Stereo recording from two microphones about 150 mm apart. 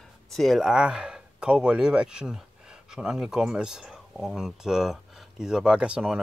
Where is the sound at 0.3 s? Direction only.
Centre (ahead or behind).